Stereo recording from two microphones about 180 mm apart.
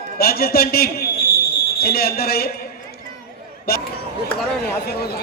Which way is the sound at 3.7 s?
60° left (ahead or behind).